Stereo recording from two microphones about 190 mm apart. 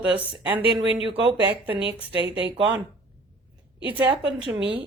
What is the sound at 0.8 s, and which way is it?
Speech, 80° right.